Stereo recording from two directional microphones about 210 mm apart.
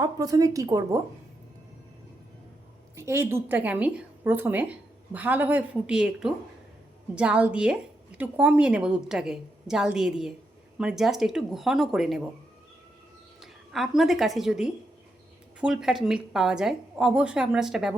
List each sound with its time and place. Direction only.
0.0 s a woman's voice: 15° right (ahead or behind)
2.9 s a woman's voice: 10° right (ahead or behind)
13.4 s a woman's voice: centre (ahead or behind)